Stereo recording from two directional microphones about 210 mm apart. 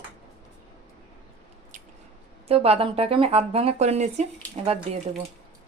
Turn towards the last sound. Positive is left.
turn(degrees=-30)  # may be behind; listen again after turning